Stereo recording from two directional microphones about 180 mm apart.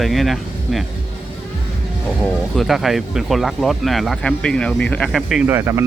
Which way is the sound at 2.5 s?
Centre (ahead or behind).